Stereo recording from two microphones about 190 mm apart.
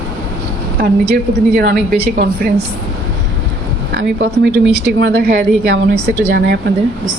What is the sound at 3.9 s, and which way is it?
Speech, 70° right (ahead or behind).